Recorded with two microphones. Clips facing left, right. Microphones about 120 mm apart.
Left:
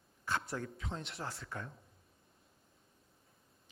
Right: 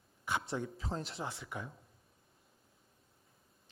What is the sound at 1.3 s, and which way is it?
Speech, centre (ahead or behind).